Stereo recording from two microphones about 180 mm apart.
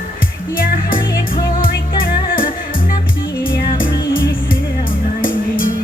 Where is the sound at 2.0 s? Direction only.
55° left (ahead or behind).